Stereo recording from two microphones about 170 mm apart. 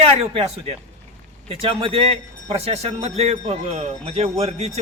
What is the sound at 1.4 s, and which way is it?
A man's voice, 35° right (ahead or behind).